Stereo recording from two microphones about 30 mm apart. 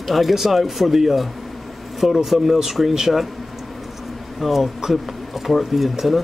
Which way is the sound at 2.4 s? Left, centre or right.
Centre.